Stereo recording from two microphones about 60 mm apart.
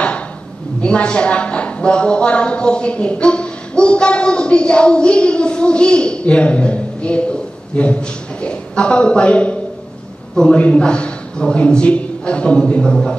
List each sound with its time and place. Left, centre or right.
0.7 s a woman's voice: centre